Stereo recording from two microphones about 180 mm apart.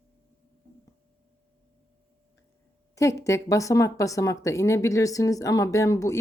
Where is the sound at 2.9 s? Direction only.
15° left (ahead or behind).